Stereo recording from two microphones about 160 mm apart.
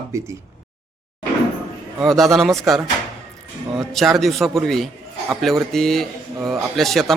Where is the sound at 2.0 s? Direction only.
Centre (ahead or behind).